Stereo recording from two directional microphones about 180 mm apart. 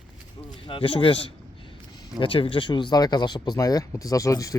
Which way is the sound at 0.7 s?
30° left (ahead or behind).